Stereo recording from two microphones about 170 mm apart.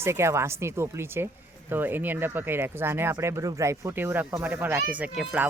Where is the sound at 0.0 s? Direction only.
15° right (ahead or behind).